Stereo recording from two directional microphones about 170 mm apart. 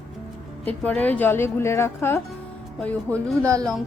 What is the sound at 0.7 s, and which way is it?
A woman's voice, 10° left (ahead or behind).